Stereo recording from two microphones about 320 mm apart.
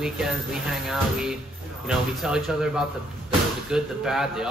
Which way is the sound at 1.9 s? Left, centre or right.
Centre.